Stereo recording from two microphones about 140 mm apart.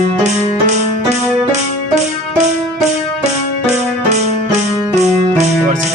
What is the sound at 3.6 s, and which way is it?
Music, 55° right (ahead or behind).